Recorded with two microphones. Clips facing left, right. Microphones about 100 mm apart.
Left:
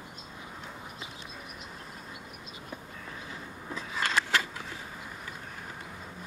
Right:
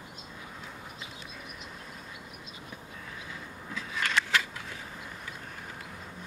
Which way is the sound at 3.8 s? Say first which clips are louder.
Left 1 dB; 30° left (ahead or behind).